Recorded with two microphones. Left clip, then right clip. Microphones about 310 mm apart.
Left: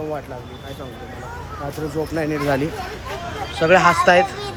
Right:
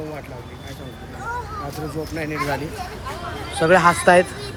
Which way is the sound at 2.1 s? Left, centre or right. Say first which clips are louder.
Left 3 dB; centre.